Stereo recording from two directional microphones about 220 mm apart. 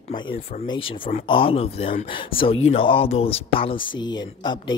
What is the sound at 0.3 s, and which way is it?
Speech, 25° left (ahead or behind).